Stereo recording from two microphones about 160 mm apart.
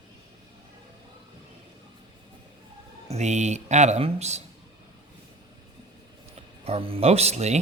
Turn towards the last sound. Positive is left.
turn(degrees=-45)  # may be behind; listen again after turning